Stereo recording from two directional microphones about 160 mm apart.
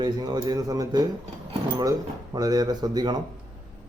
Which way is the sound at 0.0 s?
25° right (ahead or behind).